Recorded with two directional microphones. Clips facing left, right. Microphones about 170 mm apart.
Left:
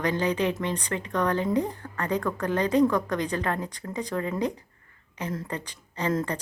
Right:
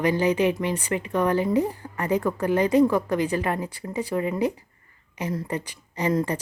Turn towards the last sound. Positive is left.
turn(degrees=-10)  # may be behind; listen again after turning